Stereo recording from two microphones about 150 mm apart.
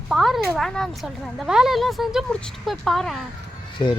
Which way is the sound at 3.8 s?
30° left (ahead or behind).